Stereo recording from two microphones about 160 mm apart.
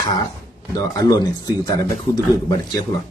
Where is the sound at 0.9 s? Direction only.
25° left (ahead or behind).